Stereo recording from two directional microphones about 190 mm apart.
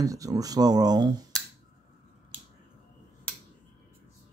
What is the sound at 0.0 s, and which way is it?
Speech, 20° right (ahead or behind).